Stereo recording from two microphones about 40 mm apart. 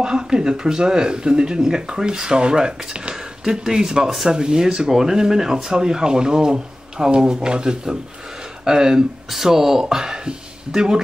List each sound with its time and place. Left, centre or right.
0.0 s speech: right